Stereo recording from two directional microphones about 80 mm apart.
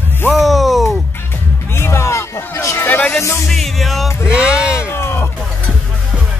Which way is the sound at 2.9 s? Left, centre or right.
Left.